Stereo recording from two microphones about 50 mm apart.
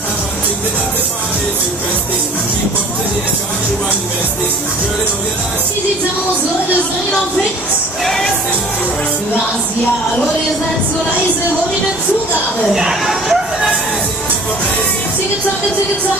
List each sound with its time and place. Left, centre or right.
8.0 s music: centre
12.7 s speech: centre